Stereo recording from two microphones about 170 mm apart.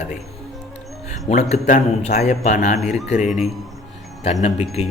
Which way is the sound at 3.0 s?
40° left (ahead or behind).